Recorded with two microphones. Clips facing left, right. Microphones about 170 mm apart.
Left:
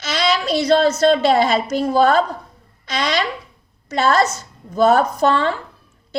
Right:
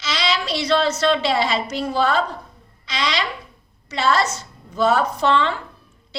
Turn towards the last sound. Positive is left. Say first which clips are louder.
# left 2 dB
turn(degrees=45)  # may be behind; listen again after turning